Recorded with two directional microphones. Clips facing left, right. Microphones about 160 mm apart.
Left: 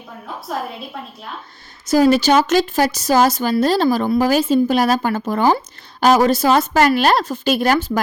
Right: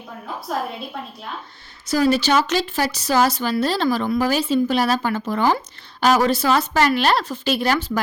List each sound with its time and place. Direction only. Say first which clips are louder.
0.1 s a woman's voice: even; centre (ahead or behind)
1.9 s a woman's voice: left 5 dB; 45° left (ahead or behind)